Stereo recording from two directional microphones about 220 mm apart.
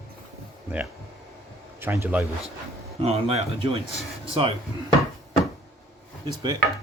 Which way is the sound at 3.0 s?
30° right (ahead or behind).